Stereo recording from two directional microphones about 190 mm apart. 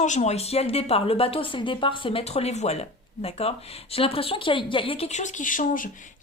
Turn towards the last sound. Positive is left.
turn(degrees=45)  # may be behind; listen again after turning